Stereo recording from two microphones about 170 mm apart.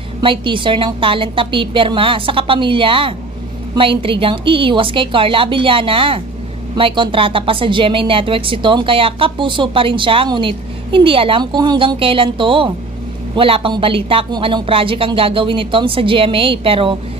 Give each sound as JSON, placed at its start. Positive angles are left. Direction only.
{"t": 0.2, "sound": "a woman's voice", "side_deg": -30}